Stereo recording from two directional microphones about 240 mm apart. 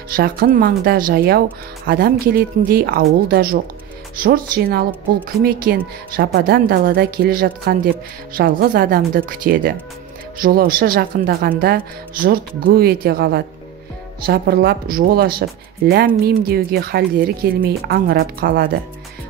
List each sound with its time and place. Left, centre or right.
0.1 s speech: right